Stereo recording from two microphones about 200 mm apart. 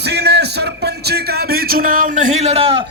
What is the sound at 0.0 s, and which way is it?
Music, 55° right (ahead or behind).